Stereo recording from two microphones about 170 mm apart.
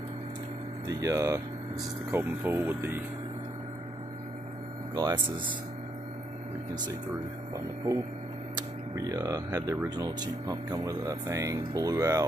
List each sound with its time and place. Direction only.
0.8 s speech: 20° right (ahead or behind)
4.9 s speech: 25° right (ahead or behind)
7.5 s speech: 20° right (ahead or behind)